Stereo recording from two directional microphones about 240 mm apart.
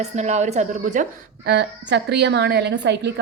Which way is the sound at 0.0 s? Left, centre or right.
Right.